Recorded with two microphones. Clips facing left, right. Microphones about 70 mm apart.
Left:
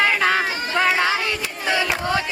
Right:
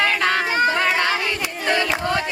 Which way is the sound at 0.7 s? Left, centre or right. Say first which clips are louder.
Left 1 dB; centre.